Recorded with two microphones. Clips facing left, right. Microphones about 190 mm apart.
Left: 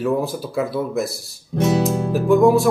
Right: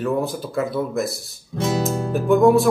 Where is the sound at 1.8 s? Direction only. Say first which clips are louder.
Left 3 dB; centre (ahead or behind).